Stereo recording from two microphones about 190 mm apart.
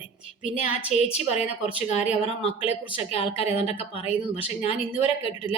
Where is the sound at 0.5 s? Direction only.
35° left (ahead or behind).